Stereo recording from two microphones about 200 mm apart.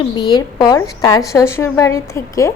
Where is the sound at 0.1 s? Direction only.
20° left (ahead or behind).